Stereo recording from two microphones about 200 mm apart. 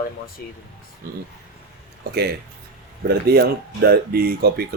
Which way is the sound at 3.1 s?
55° right (ahead or behind).